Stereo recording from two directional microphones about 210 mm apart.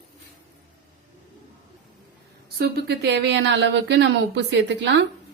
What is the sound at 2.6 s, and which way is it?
Speech, 50° right (ahead or behind).